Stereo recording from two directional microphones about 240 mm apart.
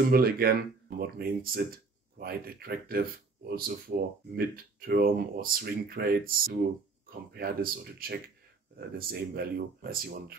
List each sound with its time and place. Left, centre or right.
0.1 s speech: right